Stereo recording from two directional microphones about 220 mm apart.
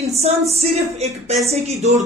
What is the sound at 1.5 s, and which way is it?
Speech, 30° right (ahead or behind).